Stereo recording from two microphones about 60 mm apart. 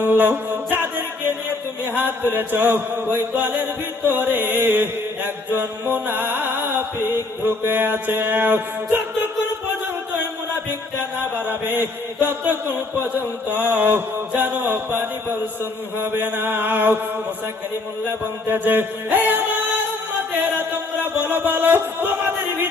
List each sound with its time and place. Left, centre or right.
0.0 s music: right
1.9 s mantra: right
11.2 s mantra: right
18.4 s mantra: right
20.3 s music: right